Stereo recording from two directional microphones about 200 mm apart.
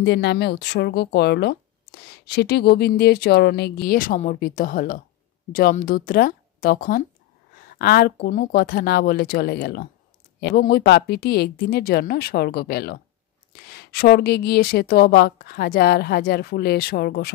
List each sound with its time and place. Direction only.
0.0 s a woman's voice: 55° left (ahead or behind)